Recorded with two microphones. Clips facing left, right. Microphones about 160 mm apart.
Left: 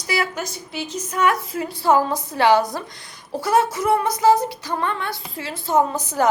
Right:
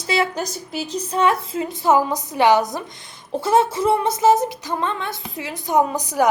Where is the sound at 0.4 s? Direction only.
40° right (ahead or behind).